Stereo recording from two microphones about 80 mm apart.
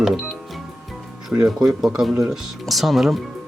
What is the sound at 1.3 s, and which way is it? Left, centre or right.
Speech, centre.